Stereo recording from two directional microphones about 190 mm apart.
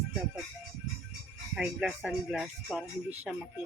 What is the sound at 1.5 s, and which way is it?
Speech, 5° right (ahead or behind).